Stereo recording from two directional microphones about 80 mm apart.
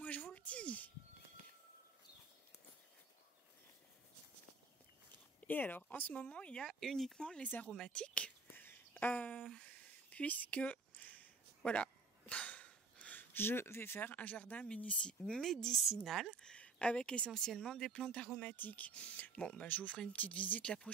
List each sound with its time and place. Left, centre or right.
0.0 s a sound: centre
5.5 s speech: left
7.4 s speech: left
7.7 s speech: centre
8.5 s a sound: left
14.1 s speech: left; by 16.5 s centre
16.5 s speech: centre